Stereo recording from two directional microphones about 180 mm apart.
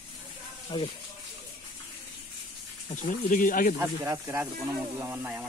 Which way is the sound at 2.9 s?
50° left (ahead or behind).